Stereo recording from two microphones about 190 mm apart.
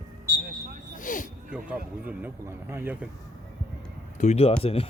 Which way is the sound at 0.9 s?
45° left (ahead or behind).